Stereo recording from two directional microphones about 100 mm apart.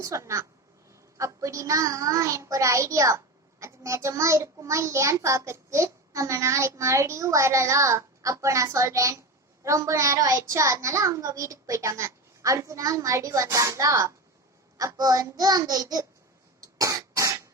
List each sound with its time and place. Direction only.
0.0 s a child's voice: 30° right (ahead or behind)
16.6 s cough: 40° right (ahead or behind)